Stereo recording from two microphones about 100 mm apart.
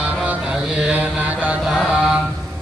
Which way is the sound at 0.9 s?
15° right (ahead or behind).